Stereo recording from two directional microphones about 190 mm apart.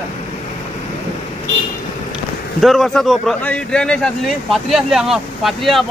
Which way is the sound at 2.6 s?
Centre (ahead or behind).